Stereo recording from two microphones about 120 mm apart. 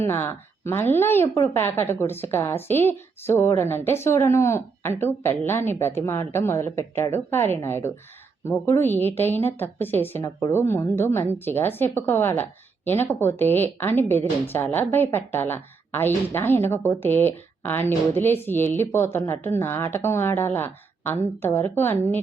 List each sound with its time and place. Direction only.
0.0 s a woman's voice: 20° left (ahead or behind)